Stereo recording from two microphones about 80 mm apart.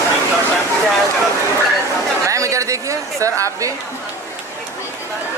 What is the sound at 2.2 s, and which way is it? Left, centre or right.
Speech, right.